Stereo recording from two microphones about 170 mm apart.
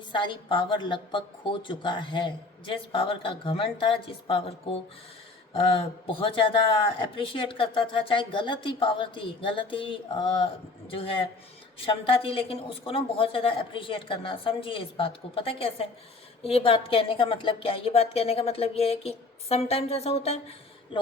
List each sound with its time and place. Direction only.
0.1 s a woman's voice: 30° left (ahead or behind)
20.9 s speech: 25° left (ahead or behind)